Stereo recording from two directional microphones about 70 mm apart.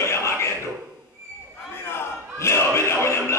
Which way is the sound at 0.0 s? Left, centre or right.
Left.